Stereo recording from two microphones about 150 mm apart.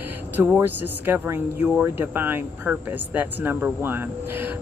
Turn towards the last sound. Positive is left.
turn(degrees=-15)  # may be behind; listen again after turning